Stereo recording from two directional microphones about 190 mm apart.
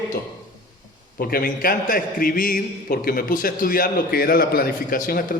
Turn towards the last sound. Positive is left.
turn(degrees=50)  # may be behind; listen again after turning